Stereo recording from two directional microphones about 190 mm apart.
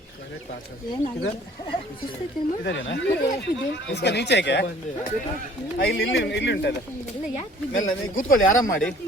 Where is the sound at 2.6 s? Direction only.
70° left (ahead or behind).